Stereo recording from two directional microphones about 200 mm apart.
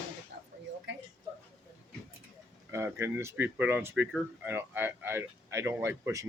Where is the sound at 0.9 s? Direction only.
65° right (ahead or behind).